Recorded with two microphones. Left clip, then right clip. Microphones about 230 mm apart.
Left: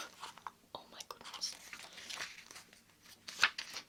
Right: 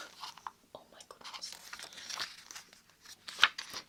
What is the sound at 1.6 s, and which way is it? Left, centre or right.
Dog, centre.